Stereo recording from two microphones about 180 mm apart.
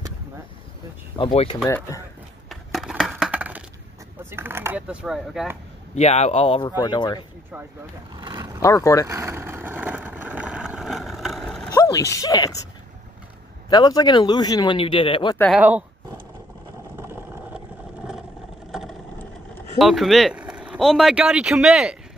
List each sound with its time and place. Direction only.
1.1 s speech: 30° left (ahead or behind)
1.7 s speech: 15° left (ahead or behind)
2.5 s crushing: centre (ahead or behind)
4.2 s a sound: 10° right (ahead or behind)
5.9 s speech: 40° left (ahead or behind)
8.2 s a sound: 20° right (ahead or behind)
8.6 s speech: 15° left (ahead or behind)
9.0 s vehicle: 15° right (ahead or behind); by 11.7 s centre (ahead or behind)
11.7 s speech: 20° left (ahead or behind)
13.7 s speech: 20° left (ahead or behind)
15.5 s speech: 10° right (ahead or behind)
19.8 s speech: centre (ahead or behind)